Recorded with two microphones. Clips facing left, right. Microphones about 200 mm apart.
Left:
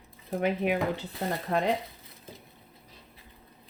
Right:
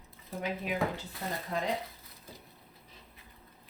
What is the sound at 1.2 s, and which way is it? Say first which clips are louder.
Speech: left 6 dB; 75° left (ahead or behind).